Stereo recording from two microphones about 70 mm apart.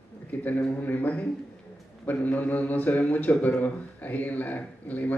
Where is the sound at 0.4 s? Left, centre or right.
Left.